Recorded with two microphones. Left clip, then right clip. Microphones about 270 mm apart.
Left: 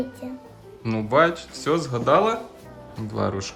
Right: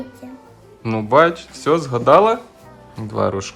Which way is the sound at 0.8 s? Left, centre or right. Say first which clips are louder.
Right 6 dB; centre.